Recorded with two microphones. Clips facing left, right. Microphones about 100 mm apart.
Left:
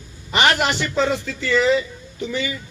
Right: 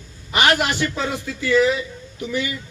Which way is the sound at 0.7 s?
10° right (ahead or behind).